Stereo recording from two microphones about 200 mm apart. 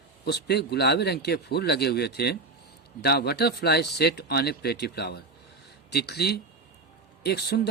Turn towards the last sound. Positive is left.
turn(degrees=55)  # may be behind; listen again after turning